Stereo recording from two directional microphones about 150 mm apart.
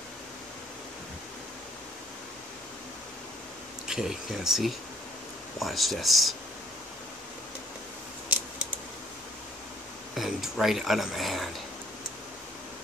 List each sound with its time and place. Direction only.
3.8 s speech: 5° right (ahead or behind)
10.1 s speech: centre (ahead or behind)